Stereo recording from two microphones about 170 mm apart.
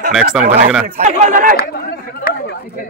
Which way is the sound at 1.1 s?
45° right (ahead or behind).